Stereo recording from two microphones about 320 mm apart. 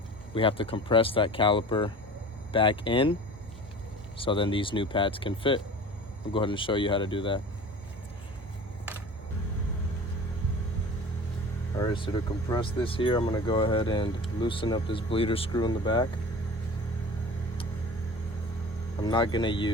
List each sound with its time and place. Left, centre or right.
0.3 s speech: centre
4.2 s speech: centre
11.8 s speech: centre
19.0 s speech: centre